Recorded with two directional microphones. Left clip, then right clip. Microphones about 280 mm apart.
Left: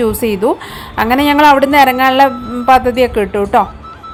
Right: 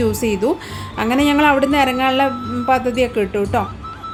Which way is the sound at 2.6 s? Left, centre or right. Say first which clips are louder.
Left 8 dB; centre.